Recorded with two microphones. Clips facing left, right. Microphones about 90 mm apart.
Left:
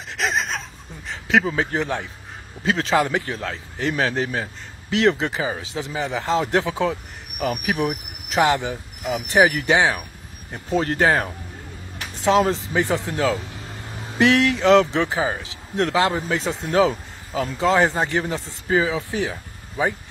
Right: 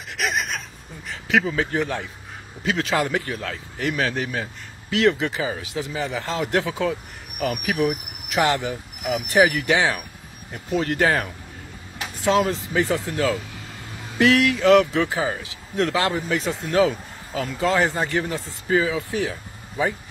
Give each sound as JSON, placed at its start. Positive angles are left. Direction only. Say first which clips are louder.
{"t": 0.2, "sound": "a sound", "louder": "left 2 dB", "side_deg": 25}
{"t": 1.0, "sound": "a man's voice", "louder": "left 2 dB", "side_deg": 25}
{"t": 10.5, "sound": "speech", "louder": "left 1 dB", "side_deg": 30}